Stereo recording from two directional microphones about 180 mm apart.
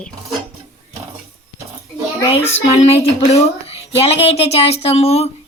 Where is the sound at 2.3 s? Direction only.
35° left (ahead or behind).